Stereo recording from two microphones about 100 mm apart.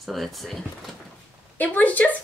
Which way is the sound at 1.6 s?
15° left (ahead or behind).